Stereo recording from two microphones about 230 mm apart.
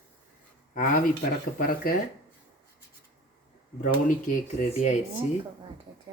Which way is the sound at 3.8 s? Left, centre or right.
Left.